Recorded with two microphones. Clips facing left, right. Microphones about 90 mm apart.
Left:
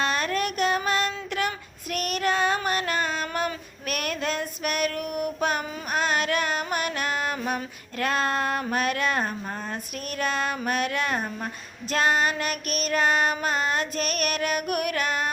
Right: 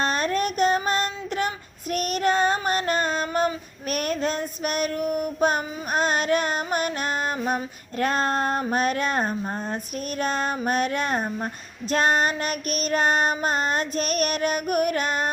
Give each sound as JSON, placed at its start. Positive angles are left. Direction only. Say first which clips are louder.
{"t": 0.0, "sound": "a sound", "louder": "right 2 dB", "side_deg": -35}
{"t": 1.9, "sound": "female singing", "louder": "right 3 dB", "side_deg": -35}
{"t": 9.4, "sound": "child singing", "louder": "right 4 dB", "side_deg": -30}